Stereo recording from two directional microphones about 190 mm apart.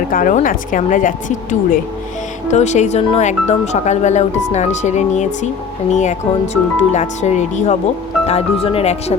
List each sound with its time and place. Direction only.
0.1 s speech: 45° left (ahead or behind)